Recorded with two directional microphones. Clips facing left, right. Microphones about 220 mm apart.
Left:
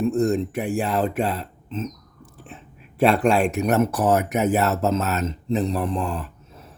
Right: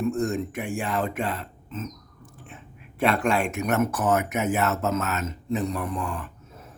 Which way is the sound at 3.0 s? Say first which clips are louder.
Left 5 dB; 35° left (ahead or behind).